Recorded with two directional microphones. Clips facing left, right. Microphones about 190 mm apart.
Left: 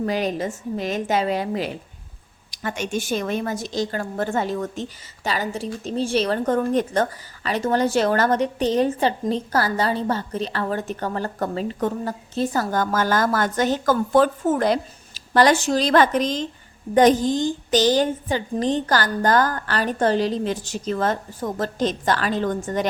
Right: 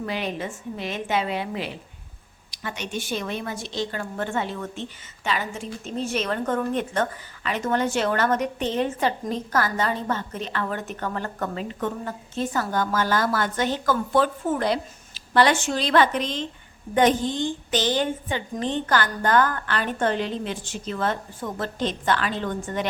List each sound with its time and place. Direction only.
0.0 s a woman's voice: 40° left (ahead or behind)